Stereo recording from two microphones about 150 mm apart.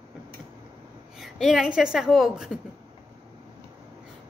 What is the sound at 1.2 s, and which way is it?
A woman's voice, centre (ahead or behind).